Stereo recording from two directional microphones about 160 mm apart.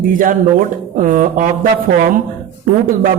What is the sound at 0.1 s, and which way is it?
Speech, 60° right (ahead or behind).